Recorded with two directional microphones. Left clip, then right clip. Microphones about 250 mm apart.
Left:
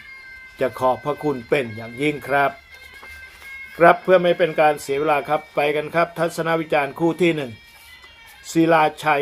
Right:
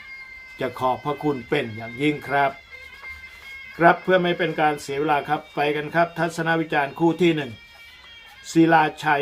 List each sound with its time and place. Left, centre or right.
0.6 s speech: centre
3.8 s speech: centre
8.4 s speech: centre